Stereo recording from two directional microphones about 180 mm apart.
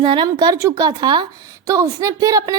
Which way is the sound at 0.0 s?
25° right (ahead or behind).